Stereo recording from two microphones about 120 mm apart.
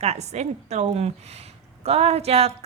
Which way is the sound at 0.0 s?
65° right (ahead or behind).